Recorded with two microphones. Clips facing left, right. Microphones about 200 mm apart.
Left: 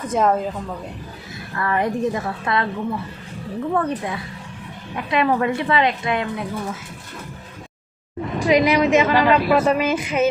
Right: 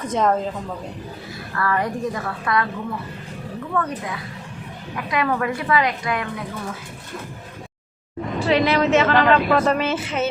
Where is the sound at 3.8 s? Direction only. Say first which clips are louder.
Right 1 dB; 30° left (ahead or behind).